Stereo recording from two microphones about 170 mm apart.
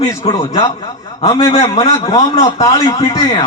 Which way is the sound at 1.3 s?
20° left (ahead or behind).